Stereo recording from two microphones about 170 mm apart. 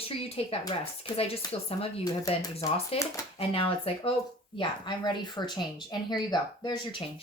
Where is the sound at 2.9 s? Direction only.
35° left (ahead or behind).